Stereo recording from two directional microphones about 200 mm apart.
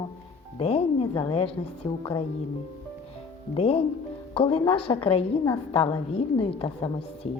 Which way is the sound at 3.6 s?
30° left (ahead or behind).